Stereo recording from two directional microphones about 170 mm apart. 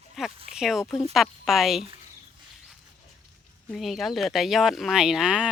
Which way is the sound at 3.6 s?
Centre (ahead or behind).